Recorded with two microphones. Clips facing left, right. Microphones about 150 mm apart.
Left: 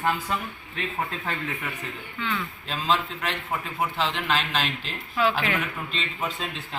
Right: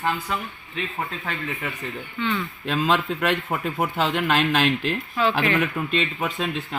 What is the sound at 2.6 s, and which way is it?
Speech, 55° right (ahead or behind).